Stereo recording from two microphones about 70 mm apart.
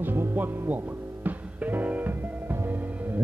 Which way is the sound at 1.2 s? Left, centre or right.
Right.